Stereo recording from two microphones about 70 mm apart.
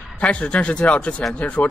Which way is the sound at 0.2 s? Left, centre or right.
Centre.